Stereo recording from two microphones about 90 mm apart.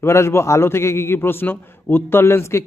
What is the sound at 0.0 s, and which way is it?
Speech, 30° left (ahead or behind).